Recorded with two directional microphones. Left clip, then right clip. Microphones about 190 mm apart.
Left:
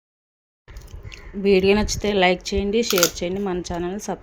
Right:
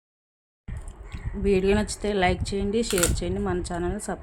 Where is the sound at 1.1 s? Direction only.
15° left (ahead or behind).